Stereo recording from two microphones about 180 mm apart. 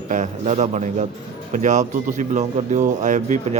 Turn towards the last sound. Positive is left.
turn(degrees=-40)  # may be behind; listen again after turning